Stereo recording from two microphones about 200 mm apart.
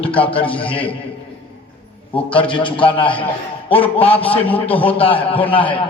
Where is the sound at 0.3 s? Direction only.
25° left (ahead or behind).